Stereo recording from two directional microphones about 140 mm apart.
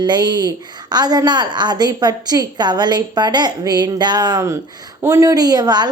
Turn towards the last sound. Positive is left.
turn(degrees=-30)  # may be behind; listen again after turning